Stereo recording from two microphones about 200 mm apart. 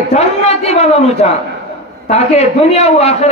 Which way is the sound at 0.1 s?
30° left (ahead or behind).